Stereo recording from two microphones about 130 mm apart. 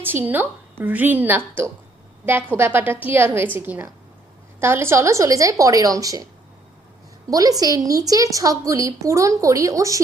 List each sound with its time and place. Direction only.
0.0 s a woman's voice: 15° right (ahead or behind)
7.3 s a woman's voice: 25° right (ahead or behind)